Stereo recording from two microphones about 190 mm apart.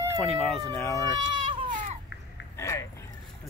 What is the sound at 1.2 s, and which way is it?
Baby cry, 25° right (ahead or behind).